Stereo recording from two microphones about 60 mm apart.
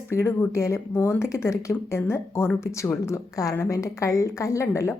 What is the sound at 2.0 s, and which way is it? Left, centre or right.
Speech, left.